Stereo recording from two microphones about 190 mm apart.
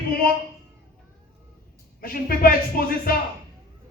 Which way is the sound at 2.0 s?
50° left (ahead or behind).